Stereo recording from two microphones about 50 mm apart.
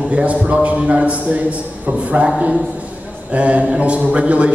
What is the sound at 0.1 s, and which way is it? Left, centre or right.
A man's voice, right.